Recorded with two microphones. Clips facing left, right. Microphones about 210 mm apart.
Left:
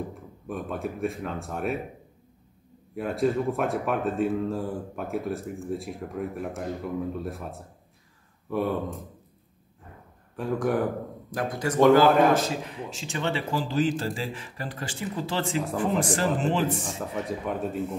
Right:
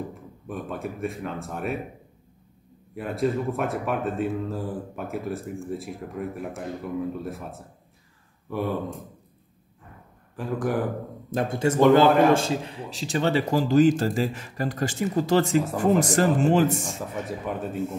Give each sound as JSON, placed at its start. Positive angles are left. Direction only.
{"t": 0.5, "sound": "speech", "side_deg": 0}
{"t": 2.9, "sound": "speech", "side_deg": 0}
{"t": 10.3, "sound": "speech", "side_deg": 0}
{"t": 11.3, "sound": "speech", "side_deg": -25}
{"t": 16.8, "sound": "speech", "side_deg": 0}